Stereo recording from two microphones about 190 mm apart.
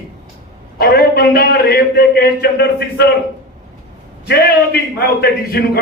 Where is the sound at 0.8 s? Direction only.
55° left (ahead or behind).